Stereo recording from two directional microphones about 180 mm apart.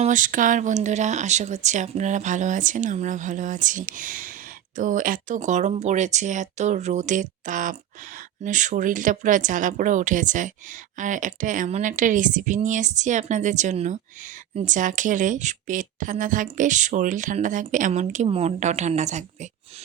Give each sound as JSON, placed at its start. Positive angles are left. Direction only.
{"t": 0.0, "sound": "speech", "side_deg": -45}